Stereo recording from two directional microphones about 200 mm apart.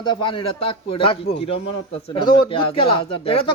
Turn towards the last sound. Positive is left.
turn(degrees=30)  # may be behind; listen again after turning